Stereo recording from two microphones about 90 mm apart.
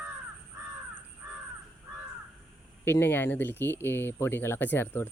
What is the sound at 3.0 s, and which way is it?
Speech, 25° left (ahead or behind).